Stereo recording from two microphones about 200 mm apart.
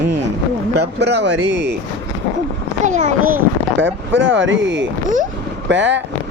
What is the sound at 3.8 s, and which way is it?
Speech, 65° right (ahead or behind).